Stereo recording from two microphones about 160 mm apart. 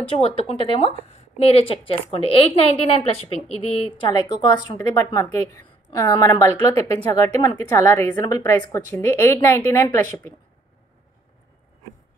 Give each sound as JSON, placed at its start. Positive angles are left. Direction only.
{"t": 0.1, "sound": "a woman's voice", "side_deg": 35}